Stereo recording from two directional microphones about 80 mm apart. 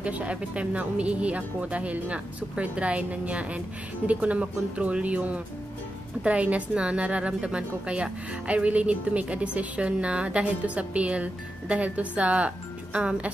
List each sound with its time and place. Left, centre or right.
0.0 s a woman's voice: centre